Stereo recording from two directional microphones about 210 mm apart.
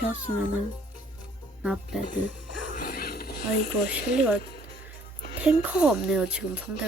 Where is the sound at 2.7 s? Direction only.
45° left (ahead or behind).